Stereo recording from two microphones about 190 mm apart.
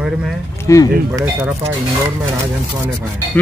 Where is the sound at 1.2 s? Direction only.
10° right (ahead or behind).